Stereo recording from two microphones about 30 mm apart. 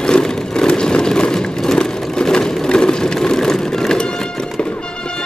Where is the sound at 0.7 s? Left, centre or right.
Left.